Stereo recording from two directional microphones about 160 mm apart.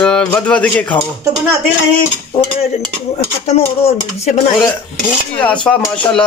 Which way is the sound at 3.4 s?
40° left (ahead or behind).